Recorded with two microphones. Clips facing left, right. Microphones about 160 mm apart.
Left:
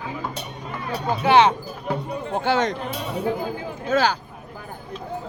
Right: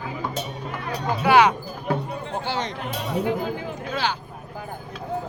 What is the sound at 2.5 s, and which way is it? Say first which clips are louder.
Music: left 8 dB; 50° left (ahead or behind).